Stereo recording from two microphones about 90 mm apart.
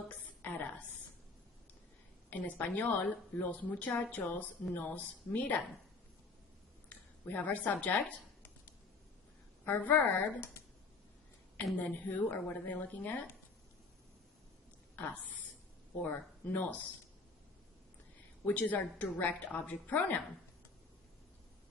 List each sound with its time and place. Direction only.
0.4 s a sound: 20° left (ahead or behind)
2.3 s a woman's voice: 20° left (ahead or behind)
6.9 s speech: 20° left (ahead or behind)
9.6 s a woman's voice: 20° left (ahead or behind)
11.9 s a woman's voice: 20° left (ahead or behind)
14.9 s a woman's voice: 20° left (ahead or behind)
18.4 s a woman's voice: 15° left (ahead or behind)